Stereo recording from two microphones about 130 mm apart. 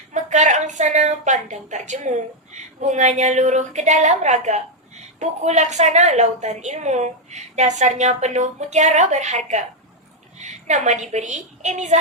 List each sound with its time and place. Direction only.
0.1 s a woman's voice: 65° right (ahead or behind)